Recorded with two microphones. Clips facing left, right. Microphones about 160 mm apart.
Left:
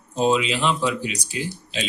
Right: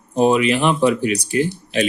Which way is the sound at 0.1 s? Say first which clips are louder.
Right 5 dB; 60° right (ahead or behind).